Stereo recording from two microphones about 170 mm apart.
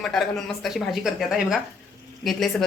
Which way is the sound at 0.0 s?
Centre (ahead or behind).